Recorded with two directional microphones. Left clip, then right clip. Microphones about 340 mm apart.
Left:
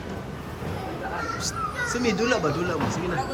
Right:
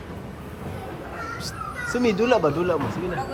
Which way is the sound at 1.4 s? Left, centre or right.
Centre.